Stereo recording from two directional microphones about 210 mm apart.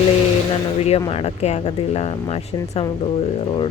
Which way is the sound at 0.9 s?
30° left (ahead or behind).